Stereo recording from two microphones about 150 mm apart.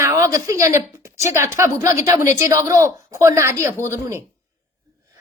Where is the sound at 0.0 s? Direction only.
20° right (ahead or behind).